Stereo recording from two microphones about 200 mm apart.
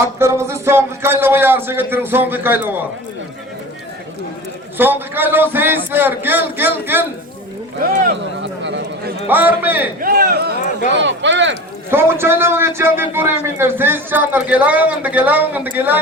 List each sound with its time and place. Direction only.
0.2 s a man's voice: 15° right (ahead or behind)
4.8 s a man's voice: 10° right (ahead or behind)
7.8 s speech: 45° right (ahead or behind)
8.4 s a sound: 65° right (ahead or behind)
9.3 s a man's voice: 10° right (ahead or behind)
10.0 s speech: 45° right (ahead or behind)
10.7 s a sound: 40° left (ahead or behind)
10.9 s speech: 65° right (ahead or behind)
11.9 s a man's voice: 10° right (ahead or behind)